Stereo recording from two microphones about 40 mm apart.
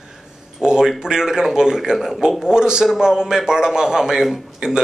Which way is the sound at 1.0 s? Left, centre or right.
Centre.